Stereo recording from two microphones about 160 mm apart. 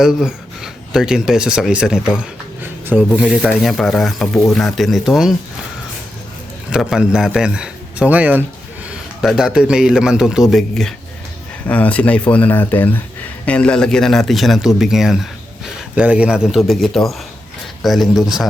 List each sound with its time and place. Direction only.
0.0 s speech: 5° right (ahead or behind)
2.1 s a sound: 10° right (ahead or behind)
3.2 s a man's voice: 5° right (ahead or behind)
6.7 s a man's voice: 5° right (ahead or behind)